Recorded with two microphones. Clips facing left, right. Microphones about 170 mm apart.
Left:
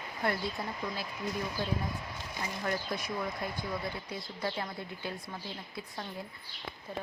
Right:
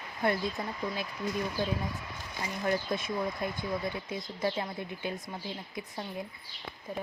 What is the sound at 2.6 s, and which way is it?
Speech, 20° right (ahead or behind).